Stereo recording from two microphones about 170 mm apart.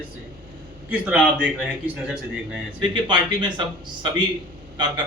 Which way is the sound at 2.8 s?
30° right (ahead or behind).